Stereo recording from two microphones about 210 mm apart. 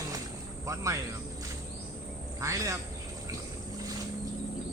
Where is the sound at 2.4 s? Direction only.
15° right (ahead or behind).